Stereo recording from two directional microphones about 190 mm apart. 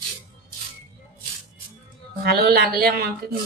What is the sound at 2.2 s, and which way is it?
Speech, 55° right (ahead or behind).